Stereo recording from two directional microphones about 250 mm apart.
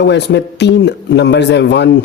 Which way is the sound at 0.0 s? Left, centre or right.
Left.